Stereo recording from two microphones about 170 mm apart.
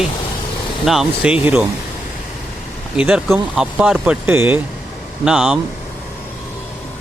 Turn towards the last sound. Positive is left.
turn(degrees=-5)  # may be behind; listen again after turning